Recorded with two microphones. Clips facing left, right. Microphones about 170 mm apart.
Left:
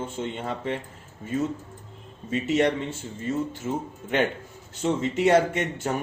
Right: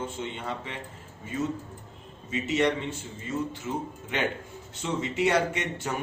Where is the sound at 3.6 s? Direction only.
50° left (ahead or behind).